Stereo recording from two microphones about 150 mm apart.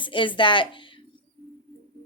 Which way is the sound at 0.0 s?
35° left (ahead or behind).